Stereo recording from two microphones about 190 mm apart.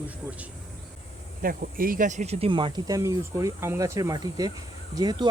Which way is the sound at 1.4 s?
50° right (ahead or behind).